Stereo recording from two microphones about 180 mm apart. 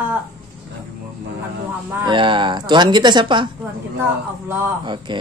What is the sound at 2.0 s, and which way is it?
A man's voice, 25° right (ahead or behind).